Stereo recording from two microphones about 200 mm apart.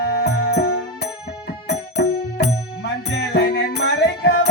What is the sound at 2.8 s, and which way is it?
Music, 55° left (ahead or behind).